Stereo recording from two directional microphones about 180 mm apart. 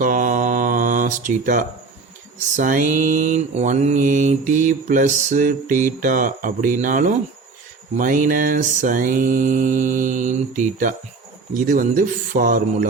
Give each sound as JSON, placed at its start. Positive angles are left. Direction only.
{"t": 0.0, "sound": "mantra", "side_deg": -45}